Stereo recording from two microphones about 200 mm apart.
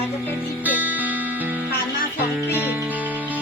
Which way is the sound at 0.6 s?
10° right (ahead or behind).